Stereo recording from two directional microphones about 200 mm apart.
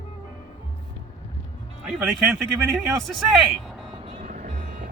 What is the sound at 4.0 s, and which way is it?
Vehicle, 30° right (ahead or behind).